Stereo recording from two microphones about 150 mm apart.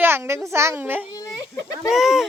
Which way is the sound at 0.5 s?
15° right (ahead or behind).